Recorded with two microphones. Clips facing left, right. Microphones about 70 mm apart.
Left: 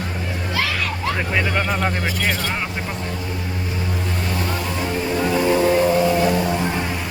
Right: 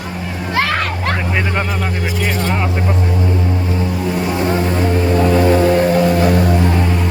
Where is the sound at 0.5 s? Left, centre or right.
Right.